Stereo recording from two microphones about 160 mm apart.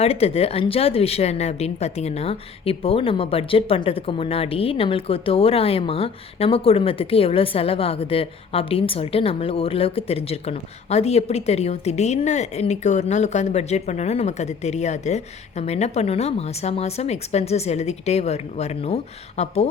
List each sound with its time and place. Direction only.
0.0 s speech: 40° left (ahead or behind)